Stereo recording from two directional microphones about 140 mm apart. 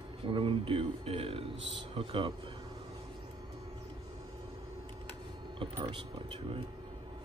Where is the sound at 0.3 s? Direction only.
40° right (ahead or behind).